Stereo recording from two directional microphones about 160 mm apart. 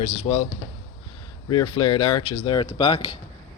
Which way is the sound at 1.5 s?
30° left (ahead or behind).